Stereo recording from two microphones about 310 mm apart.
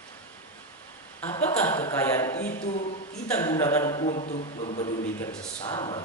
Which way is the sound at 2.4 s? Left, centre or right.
Left.